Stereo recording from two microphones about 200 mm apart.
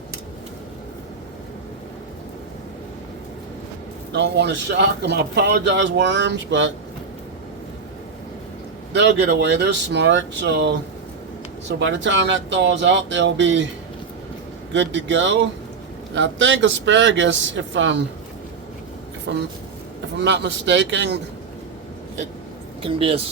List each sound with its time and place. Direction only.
4.1 s a man's voice: 60° right (ahead or behind)
8.9 s a man's voice: 60° right (ahead or behind)
11.8 s a man's voice: 65° right (ahead or behind)
14.7 s a man's voice: 65° right (ahead or behind)
19.3 s a man's voice: 60° right (ahead or behind)
22.8 s speech: 25° right (ahead or behind)